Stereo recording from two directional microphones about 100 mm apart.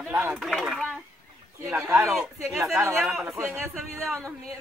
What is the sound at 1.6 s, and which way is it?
Speech, 25° right (ahead or behind).